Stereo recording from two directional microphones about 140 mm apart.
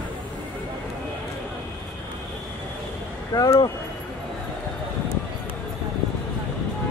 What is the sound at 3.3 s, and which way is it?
Speech, 25° left (ahead or behind).